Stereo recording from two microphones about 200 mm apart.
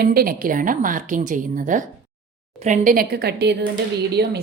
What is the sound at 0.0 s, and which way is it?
A woman's voice, 50° right (ahead or behind).